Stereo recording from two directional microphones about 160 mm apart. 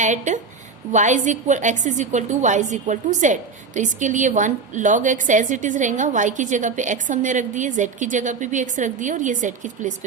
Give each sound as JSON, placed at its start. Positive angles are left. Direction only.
{"t": 0.0, "sound": "a woman's voice", "side_deg": -50}